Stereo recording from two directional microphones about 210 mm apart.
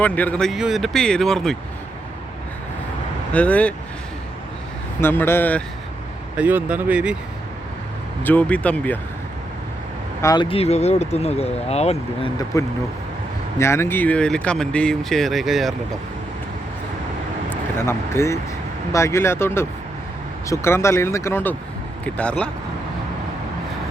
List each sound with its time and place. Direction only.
0.0 s speech: 5° left (ahead or behind)
3.3 s speech: 5° left (ahead or behind)
4.9 s speech: 10° left (ahead or behind)
6.3 s speech: 5° right (ahead or behind)
8.2 s speech: 10° left (ahead or behind)
10.2 s speech: 20° left (ahead or behind)
12.5 s speech: 15° left (ahead or behind); by 15.7 s centre (ahead or behind)
17.7 s speech: 10° left (ahead or behind)